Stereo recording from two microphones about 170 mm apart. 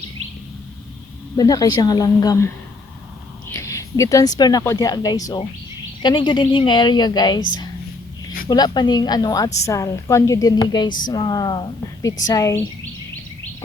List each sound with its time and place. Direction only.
1.4 s a woman's voice: 20° left (ahead or behind)
3.5 s a sound: 15° left (ahead or behind)
4.4 s a woman's voice: 25° left (ahead or behind)
8.4 s a woman's voice: 25° left (ahead or behind)